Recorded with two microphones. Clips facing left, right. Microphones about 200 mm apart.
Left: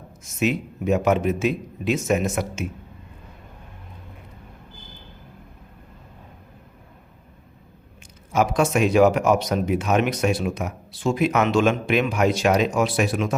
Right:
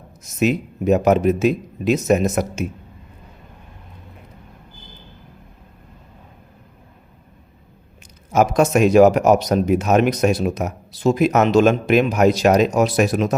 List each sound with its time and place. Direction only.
0.3 s speech: 40° right (ahead or behind)
8.3 s speech: 45° right (ahead or behind)